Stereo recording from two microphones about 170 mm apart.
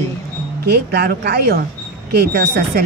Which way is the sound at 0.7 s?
70° right (ahead or behind).